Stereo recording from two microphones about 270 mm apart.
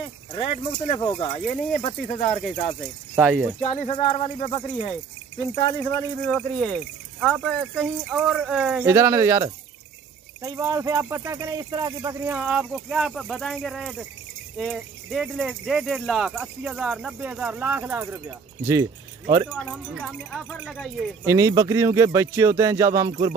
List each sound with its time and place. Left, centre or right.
0.3 s speech: left
3.2 s speech: centre
3.6 s speech: left; by 19.4 s centre
19.5 s speech: centre